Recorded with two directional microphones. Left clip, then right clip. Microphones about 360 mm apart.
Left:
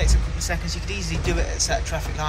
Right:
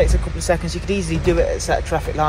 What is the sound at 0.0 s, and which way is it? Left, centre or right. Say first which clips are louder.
Speech: right 9 dB; centre.